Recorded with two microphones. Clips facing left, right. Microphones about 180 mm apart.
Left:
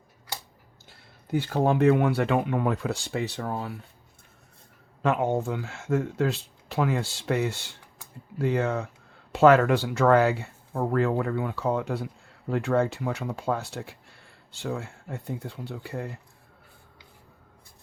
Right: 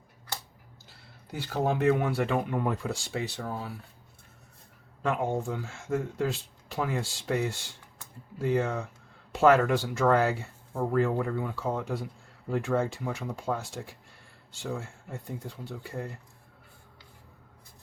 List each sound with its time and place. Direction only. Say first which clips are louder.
0.9 s speech: left 12 dB; 55° left (ahead or behind)
5.0 s speech: left 4 dB; 70° left (ahead or behind)